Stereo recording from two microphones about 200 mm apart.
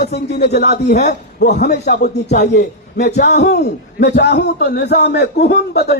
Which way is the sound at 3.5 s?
55° left (ahead or behind).